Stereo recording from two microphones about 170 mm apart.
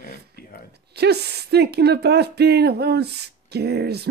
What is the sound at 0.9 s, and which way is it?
Speech, 75° right (ahead or behind).